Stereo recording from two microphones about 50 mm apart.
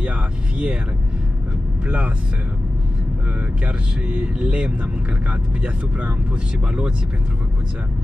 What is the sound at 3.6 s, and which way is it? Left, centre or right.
Speech, right.